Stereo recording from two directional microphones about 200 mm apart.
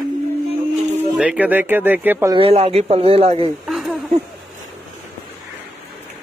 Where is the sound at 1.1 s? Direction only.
5° right (ahead or behind).